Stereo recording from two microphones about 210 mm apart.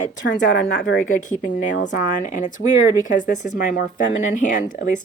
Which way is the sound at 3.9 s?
40° left (ahead or behind).